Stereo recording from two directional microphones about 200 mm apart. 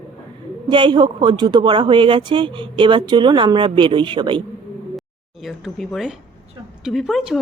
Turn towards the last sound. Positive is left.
turn(degrees=0)  # may be behind; listen again after turning